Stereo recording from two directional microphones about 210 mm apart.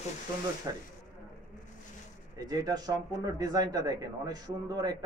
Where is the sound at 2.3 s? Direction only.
15° right (ahead or behind).